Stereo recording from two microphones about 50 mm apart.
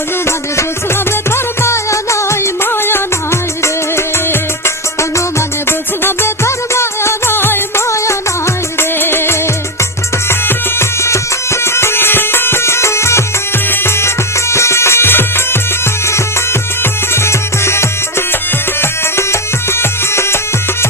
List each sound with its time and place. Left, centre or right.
1.6 s music: left
8.8 s music: left
10.8 s music: left
11.6 s music: left
13.7 s music: left
14.5 s music: left
16.8 s music: left